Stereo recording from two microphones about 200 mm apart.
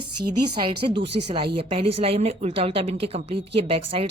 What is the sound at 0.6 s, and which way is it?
A woman's voice, 25° right (ahead or behind).